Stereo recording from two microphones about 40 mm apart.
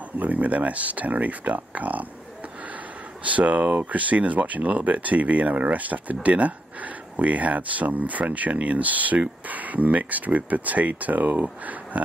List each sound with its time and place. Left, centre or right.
0.2 s speech: right
3.3 s speech: right